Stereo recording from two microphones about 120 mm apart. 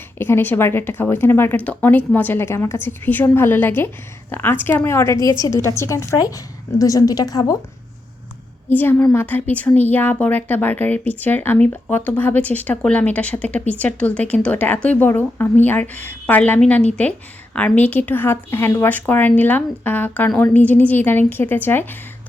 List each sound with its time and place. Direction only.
0.2 s a woman's voice: 20° left (ahead or behind)
8.7 s speech: 15° left (ahead or behind)